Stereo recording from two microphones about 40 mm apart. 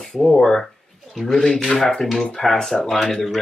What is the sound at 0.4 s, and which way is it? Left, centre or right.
Speech, centre.